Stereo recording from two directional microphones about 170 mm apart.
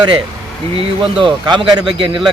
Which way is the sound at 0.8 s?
30° right (ahead or behind).